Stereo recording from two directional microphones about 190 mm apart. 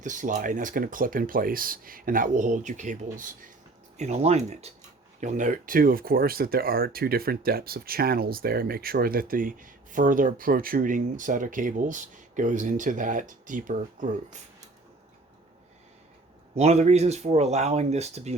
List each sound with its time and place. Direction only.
0.0 s speech: 40° right (ahead or behind)
16.6 s speech: 35° right (ahead or behind)